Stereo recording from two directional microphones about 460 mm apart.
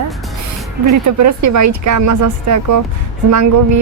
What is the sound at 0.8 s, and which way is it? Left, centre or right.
Speech, right.